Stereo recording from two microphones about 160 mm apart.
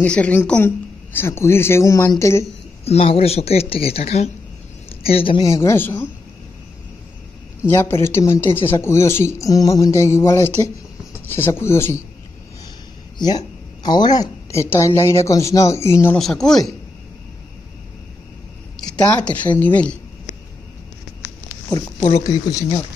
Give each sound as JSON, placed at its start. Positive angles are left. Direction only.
{"t": 0.0, "sound": "speech", "side_deg": 10}
{"t": 2.8, "sound": "speech", "side_deg": 40}
{"t": 5.5, "sound": "speech", "side_deg": 15}
{"t": 7.6, "sound": "speech", "side_deg": 15}
{"t": 13.8, "sound": "speech", "side_deg": 25}
{"t": 16.2, "sound": "speech", "side_deg": 0}
{"t": 18.9, "sound": "speech", "side_deg": 10}
{"t": 22.2, "sound": "speech", "side_deg": 20}